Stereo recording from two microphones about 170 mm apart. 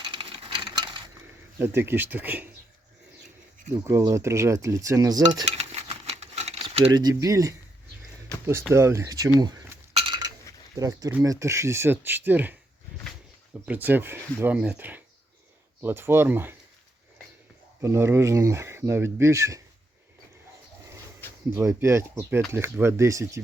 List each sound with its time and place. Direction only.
0.0 s a sound: 30° right (ahead or behind)
1.5 s speech: 15° right (ahead or behind)
3.8 s speech: 15° right (ahead or behind)
5.5 s a sound: 40° right (ahead or behind); by 7.5 s 20° right (ahead or behind)
8.7 s speech: 15° right (ahead or behind)
9.4 s a sound: 20° right (ahead or behind)
9.9 s chink: 30° right (ahead or behind)
10.8 s speech: 20° right (ahead or behind)
13.7 s speech: 10° right (ahead or behind)
17.8 s speech: 15° right (ahead or behind)
21.5 s speech: 15° right (ahead or behind)